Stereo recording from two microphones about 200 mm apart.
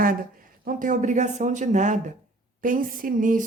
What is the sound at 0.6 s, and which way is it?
Speech, 40° right (ahead or behind).